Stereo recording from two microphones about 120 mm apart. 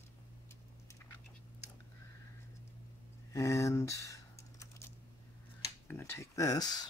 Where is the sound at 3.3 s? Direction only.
25° left (ahead or behind).